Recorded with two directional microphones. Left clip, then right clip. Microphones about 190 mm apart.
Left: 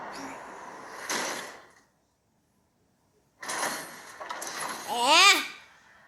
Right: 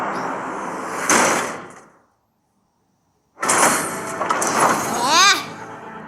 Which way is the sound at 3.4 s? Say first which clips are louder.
Right 16 dB; 20° right (ahead or behind).